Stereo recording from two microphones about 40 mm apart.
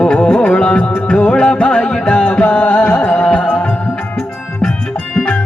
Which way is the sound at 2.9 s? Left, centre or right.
Left.